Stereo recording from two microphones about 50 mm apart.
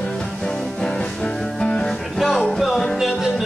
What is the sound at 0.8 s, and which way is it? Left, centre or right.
Music, centre.